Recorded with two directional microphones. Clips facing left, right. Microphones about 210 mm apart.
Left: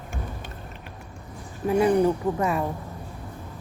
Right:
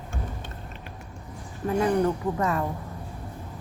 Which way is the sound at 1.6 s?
15° left (ahead or behind).